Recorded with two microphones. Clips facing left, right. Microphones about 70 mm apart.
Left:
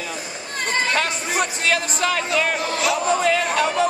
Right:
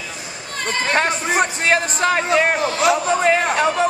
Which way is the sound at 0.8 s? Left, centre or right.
Right.